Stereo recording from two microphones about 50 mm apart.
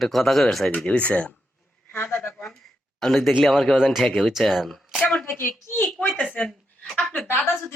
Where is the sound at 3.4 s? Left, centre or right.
Centre.